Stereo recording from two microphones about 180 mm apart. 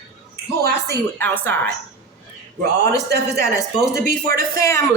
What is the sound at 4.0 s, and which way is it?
Speech, 55° right (ahead or behind).